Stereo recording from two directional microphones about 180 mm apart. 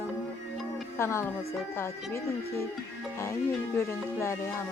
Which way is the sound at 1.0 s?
15° left (ahead or behind).